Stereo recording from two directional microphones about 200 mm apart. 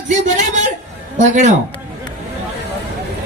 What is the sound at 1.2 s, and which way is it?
Speech, 40° right (ahead or behind).